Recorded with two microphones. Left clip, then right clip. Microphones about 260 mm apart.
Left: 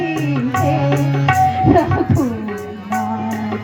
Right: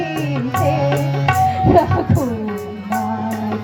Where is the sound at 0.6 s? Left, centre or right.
Right.